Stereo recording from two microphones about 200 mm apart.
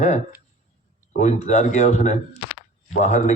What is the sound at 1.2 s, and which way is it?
A man's voice, 35° left (ahead or behind).